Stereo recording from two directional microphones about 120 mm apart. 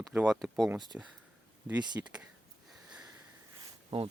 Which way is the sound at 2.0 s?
20° right (ahead or behind).